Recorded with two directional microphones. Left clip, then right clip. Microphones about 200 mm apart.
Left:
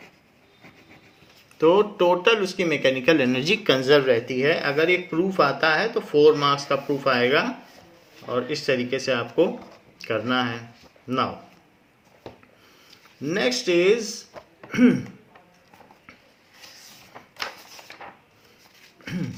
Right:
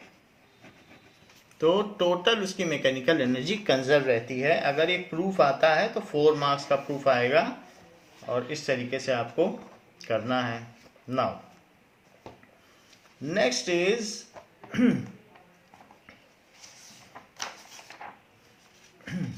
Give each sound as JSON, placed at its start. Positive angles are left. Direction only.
{"t": 1.5, "sound": "speech", "side_deg": 40}
{"t": 13.2, "sound": "speech", "side_deg": 40}
{"t": 14.3, "sound": "a sound", "side_deg": 45}
{"t": 14.7, "sound": "speech", "side_deg": 40}
{"t": 17.1, "sound": "drawer open or close", "side_deg": 50}
{"t": 19.0, "sound": "a sound", "side_deg": 40}